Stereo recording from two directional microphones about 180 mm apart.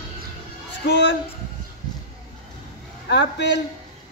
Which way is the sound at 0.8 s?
70° left (ahead or behind).